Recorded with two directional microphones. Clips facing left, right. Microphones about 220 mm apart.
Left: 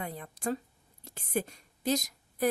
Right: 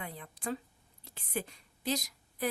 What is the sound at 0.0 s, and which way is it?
A woman's voice, 45° left (ahead or behind).